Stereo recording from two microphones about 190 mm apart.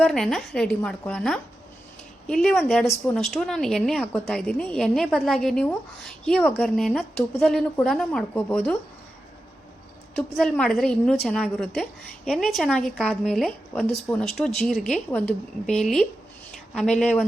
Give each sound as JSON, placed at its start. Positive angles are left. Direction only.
{"t": 0.0, "sound": "a woman's voice", "side_deg": 0}
{"t": 10.3, "sound": "a woman's voice", "side_deg": 0}